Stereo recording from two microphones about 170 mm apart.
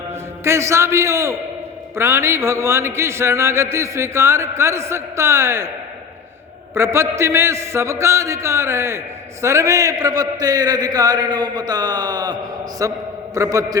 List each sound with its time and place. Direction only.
0.1 s a man's voice: 15° right (ahead or behind)
6.7 s a man's voice: 15° right (ahead or behind)